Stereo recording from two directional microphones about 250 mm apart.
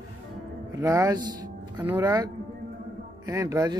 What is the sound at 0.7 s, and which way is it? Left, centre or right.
Speech, centre.